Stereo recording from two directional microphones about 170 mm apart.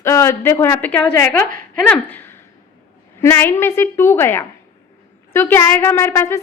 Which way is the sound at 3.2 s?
15° left (ahead or behind).